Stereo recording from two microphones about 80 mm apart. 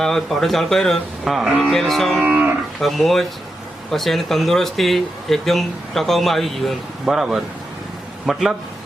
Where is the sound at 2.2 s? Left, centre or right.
Centre.